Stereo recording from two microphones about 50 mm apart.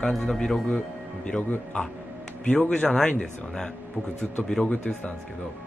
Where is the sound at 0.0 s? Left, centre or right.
Centre.